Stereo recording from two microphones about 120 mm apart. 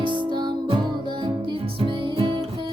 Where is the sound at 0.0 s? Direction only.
45° right (ahead or behind).